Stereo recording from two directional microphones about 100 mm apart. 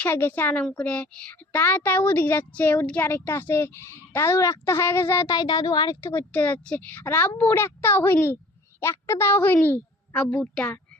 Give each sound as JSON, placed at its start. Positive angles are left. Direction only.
{"t": 0.0, "sound": "a woman's voice", "side_deg": 25}
{"t": 5.3, "sound": "speech", "side_deg": 40}
{"t": 6.0, "sound": "speech", "side_deg": 25}